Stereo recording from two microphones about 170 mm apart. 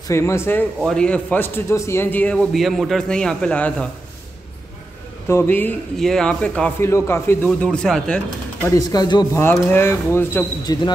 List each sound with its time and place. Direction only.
0.1 s a man's voice: 15° left (ahead or behind)
2.3 s a man's voice: centre (ahead or behind)
5.3 s a man's voice: 10° left (ahead or behind)
8.6 s a man's voice: 20° left (ahead or behind)